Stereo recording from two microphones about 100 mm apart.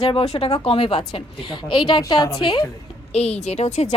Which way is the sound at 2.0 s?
40° left (ahead or behind).